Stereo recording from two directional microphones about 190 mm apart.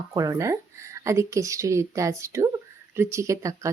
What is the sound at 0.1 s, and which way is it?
Speech, 20° right (ahead or behind).